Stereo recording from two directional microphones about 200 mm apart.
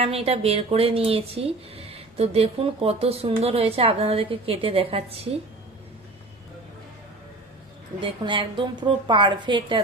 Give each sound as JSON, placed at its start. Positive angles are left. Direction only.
{"t": 0.0, "sound": "speech", "side_deg": -30}
{"t": 8.0, "sound": "speech", "side_deg": -25}